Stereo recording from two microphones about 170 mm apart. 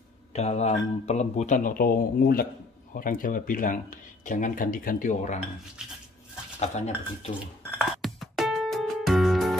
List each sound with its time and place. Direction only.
0.3 s speech: 40° left (ahead or behind)
6.6 s speech: 40° left (ahead or behind)
7.8 s music: centre (ahead or behind)